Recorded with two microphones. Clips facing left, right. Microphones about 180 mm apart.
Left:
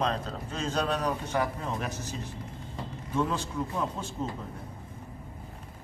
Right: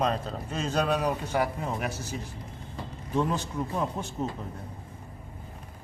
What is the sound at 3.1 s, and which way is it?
A man's voice, 15° right (ahead or behind).